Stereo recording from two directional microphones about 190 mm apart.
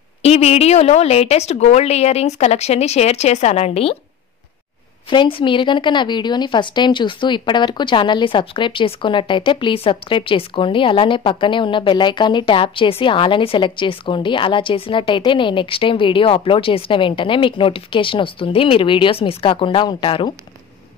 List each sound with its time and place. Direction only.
0.2 s a woman's voice: 35° left (ahead or behind)
5.1 s speech: 25° left (ahead or behind)